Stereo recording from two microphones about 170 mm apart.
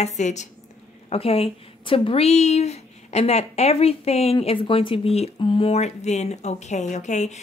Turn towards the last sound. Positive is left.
turn(degrees=45)  # may be behind; listen again after turning